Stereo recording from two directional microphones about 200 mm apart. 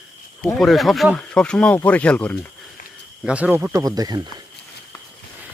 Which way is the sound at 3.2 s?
5° right (ahead or behind).